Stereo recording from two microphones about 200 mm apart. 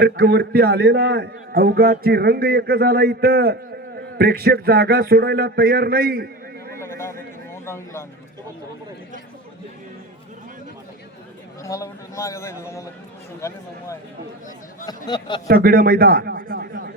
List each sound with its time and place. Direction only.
0.0 s a man's voice: 50° right (ahead or behind)
6.7 s a sound: 15° left (ahead or behind)
7.5 s a man's voice: 15° left (ahead or behind)
11.6 s a man's voice: 15° left (ahead or behind)
15.4 s a man's voice: 50° right (ahead or behind)